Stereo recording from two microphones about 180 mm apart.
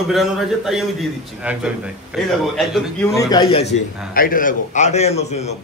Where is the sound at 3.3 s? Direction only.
30° left (ahead or behind).